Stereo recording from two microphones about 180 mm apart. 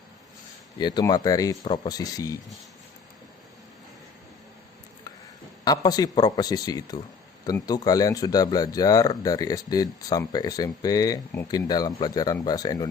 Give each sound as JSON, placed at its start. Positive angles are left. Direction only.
{"t": 0.8, "sound": "speech", "side_deg": 25}
{"t": 5.6, "sound": "speech", "side_deg": 20}